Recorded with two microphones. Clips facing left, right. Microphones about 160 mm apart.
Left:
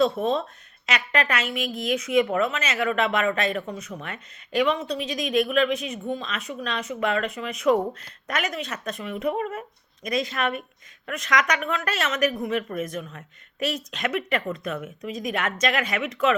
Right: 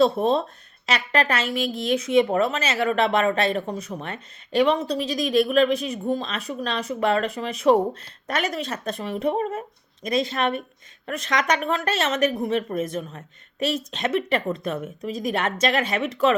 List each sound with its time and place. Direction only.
0.0 s speech: 35° right (ahead or behind)